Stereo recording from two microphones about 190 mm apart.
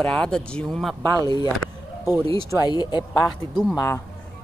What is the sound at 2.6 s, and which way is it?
Speech, 20° left (ahead or behind).